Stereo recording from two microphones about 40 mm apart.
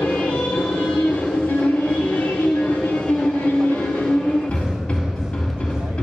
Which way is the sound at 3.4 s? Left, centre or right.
Left.